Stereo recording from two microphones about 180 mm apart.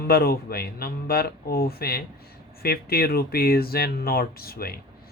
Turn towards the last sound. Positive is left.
turn(degrees=55)  # may be behind; listen again after turning